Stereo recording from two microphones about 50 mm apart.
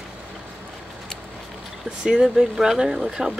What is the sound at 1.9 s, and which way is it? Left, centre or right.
Speech, centre.